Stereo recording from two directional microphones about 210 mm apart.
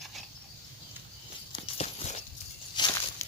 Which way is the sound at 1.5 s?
30° left (ahead or behind).